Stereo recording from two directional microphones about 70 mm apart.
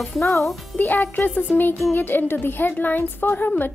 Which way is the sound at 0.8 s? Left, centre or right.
Left.